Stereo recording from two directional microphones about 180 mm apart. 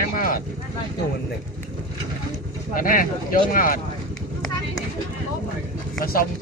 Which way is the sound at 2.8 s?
50° left (ahead or behind).